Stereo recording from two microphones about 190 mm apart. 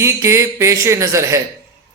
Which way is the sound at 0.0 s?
15° right (ahead or behind).